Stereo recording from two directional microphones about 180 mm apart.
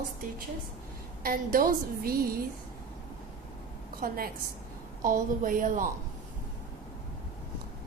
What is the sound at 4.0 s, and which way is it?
A woman's voice, 55° right (ahead or behind).